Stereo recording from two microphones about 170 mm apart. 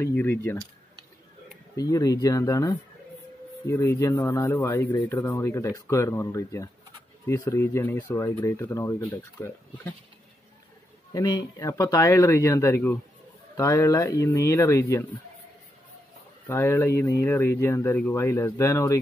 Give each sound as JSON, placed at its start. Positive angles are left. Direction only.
{"t": 0.0, "sound": "speech", "side_deg": 15}
{"t": 1.8, "sound": "speech", "side_deg": 20}
{"t": 11.1, "sound": "speech", "side_deg": 20}
{"t": 16.4, "sound": "speech", "side_deg": 15}